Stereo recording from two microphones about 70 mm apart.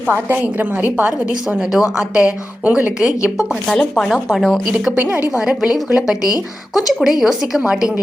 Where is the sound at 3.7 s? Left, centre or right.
Centre.